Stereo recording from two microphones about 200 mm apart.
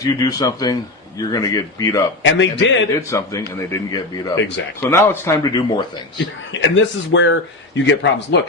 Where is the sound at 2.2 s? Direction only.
65° left (ahead or behind).